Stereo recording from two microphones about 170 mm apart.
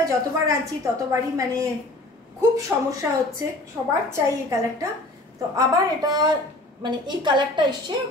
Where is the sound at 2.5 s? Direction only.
20° right (ahead or behind).